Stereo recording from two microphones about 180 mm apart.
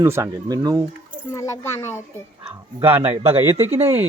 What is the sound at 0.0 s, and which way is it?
Speech, 15° right (ahead or behind).